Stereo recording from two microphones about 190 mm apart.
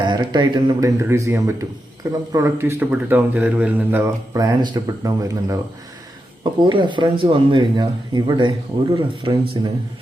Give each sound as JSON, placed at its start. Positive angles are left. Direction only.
{"t": 0.0, "sound": "speech", "side_deg": -25}
{"t": 6.7, "sound": "speech", "side_deg": -25}